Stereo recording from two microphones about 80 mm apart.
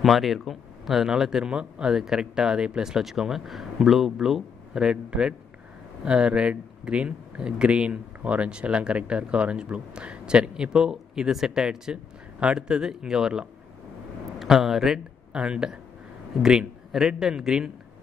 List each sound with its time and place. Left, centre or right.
0.0 s a man's voice: centre